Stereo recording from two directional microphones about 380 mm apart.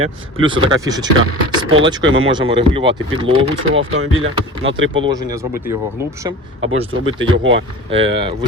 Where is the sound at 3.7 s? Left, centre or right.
Right.